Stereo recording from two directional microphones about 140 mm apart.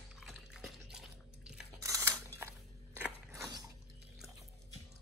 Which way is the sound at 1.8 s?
25° right (ahead or behind).